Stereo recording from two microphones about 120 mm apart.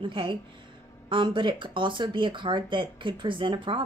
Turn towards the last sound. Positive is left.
turn(degrees=-45)  # may be behind; listen again after turning